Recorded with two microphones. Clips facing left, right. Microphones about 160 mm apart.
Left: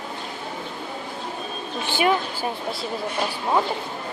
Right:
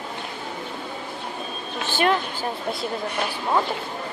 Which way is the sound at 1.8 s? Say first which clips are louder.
Even; 10° left (ahead or behind).